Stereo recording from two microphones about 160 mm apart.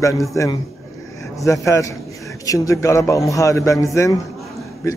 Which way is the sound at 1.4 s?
20° left (ahead or behind).